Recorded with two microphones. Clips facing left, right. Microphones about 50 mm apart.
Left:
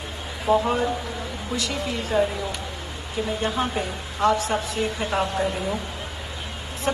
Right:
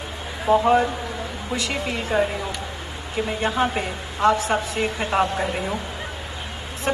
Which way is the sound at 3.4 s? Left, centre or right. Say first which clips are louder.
Right 5 dB; right.